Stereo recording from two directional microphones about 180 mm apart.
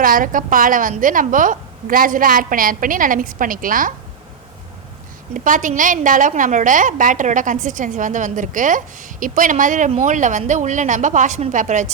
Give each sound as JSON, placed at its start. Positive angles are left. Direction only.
{"t": 0.0, "sound": "a woman's voice", "side_deg": -50}
{"t": 5.3, "sound": "a woman's voice", "side_deg": -45}